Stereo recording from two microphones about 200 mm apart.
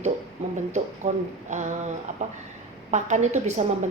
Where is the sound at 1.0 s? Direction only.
35° right (ahead or behind).